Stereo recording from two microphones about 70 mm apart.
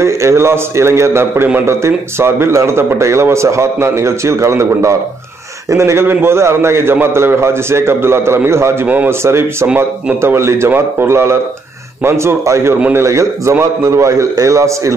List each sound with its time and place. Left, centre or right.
0.0 s a man's voice: right
8.8 s a man's voice: right
9.2 s a man's voice: right